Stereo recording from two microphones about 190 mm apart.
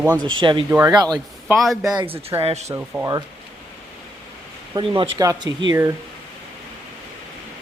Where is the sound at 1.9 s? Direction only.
20° right (ahead or behind).